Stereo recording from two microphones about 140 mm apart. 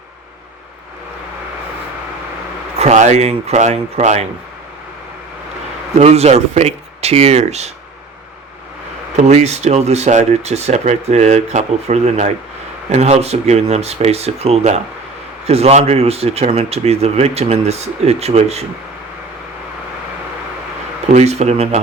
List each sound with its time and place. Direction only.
2.7 s speech: 55° right (ahead or behind)
6.0 s speech: 50° right (ahead or behind)
9.1 s speech: 55° right (ahead or behind)
21.1 s speech: 50° right (ahead or behind)